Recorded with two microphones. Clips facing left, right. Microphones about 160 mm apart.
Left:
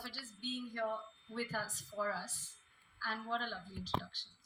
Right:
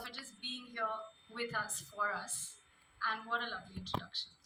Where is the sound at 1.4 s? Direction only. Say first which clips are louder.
Even; 35° left (ahead or behind).